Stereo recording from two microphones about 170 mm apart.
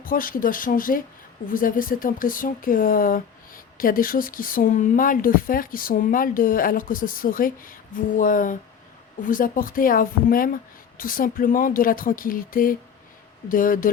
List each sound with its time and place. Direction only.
0.0 s speech: 55° left (ahead or behind)